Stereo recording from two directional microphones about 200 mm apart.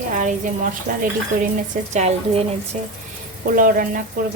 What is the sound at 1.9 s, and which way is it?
Speech, 35° right (ahead or behind).